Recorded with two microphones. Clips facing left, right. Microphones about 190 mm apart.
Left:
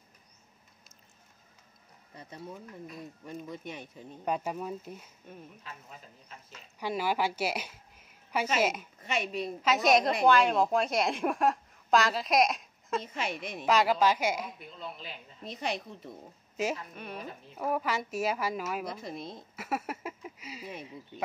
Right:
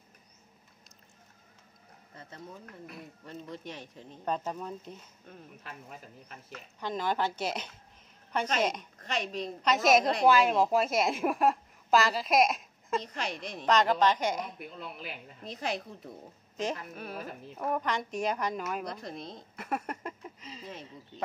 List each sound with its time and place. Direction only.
2.1 s speech: 15° left (ahead or behind)
6.8 s a woman's voice: 10° left (ahead or behind)